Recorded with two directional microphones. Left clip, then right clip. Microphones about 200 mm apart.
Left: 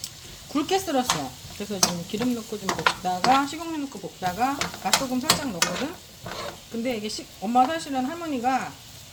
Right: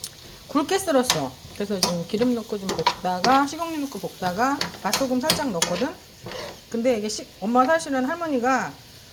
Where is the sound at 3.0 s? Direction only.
5° right (ahead or behind).